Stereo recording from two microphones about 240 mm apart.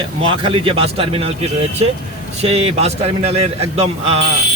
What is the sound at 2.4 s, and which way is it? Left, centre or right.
Speech, right.